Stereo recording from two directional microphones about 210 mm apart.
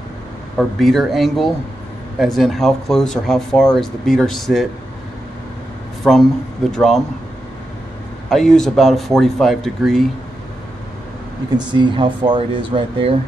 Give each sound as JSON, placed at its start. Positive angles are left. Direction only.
{"t": 0.6, "sound": "speech", "side_deg": 0}
{"t": 6.0, "sound": "speech", "side_deg": 0}
{"t": 8.3, "sound": "speech", "side_deg": 0}
{"t": 11.5, "sound": "speech", "side_deg": -20}